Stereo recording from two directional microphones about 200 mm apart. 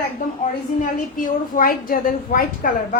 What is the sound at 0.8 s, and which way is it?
A woman's voice, 40° left (ahead or behind).